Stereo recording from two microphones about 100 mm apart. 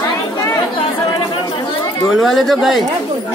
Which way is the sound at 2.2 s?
Centre (ahead or behind).